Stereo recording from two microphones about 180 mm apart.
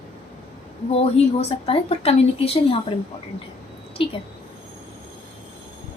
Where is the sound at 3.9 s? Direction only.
30° left (ahead or behind).